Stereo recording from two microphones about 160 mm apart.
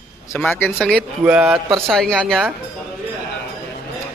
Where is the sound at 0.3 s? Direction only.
5° left (ahead or behind).